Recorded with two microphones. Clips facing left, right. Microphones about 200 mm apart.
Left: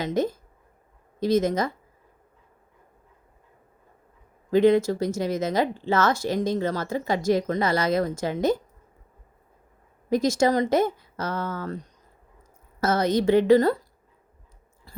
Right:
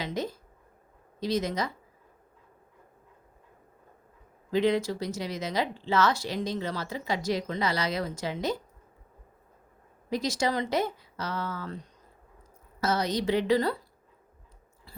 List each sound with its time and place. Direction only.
0.0 s speech: 50° left (ahead or behind)
4.5 s speech: 50° left (ahead or behind)
10.1 s speech: 50° left (ahead or behind)
12.8 s speech: 50° left (ahead or behind)